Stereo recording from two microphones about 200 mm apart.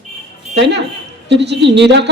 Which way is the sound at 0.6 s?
60° right (ahead or behind).